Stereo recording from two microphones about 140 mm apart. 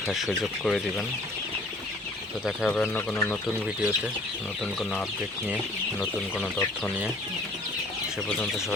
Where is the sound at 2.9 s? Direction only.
15° left (ahead or behind).